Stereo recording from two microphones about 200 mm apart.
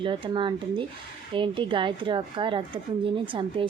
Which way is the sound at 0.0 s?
25° right (ahead or behind).